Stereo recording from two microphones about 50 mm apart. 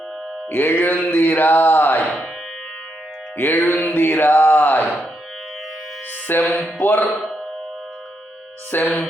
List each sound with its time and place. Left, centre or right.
0.5 s speech: left
3.3 s speech: left
3.9 s a sound: left
6.3 s speech: left
8.7 s speech: left